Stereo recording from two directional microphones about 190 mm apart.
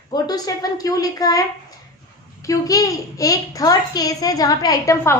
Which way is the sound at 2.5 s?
20° left (ahead or behind).